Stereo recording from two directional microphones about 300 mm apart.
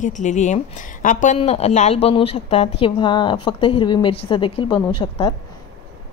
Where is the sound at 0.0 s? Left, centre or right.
Left.